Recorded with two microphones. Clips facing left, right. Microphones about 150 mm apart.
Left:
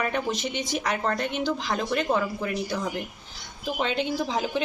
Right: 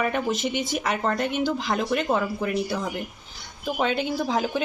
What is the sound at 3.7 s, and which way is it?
Speech, 5° right (ahead or behind).